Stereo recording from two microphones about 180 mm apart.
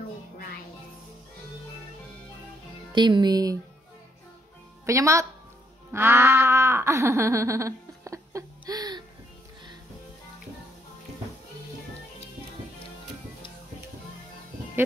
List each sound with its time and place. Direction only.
2.9 s speech: 25° right (ahead or behind)
4.8 s a woman's voice: 15° right (ahead or behind)
5.9 s wail: 10° right (ahead or behind)